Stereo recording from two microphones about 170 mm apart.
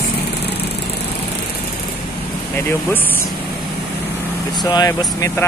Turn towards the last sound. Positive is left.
turn(degrees=20)  # may be behind; listen again after turning